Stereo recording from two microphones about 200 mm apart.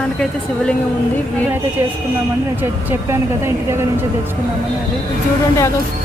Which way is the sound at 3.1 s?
15° right (ahead or behind).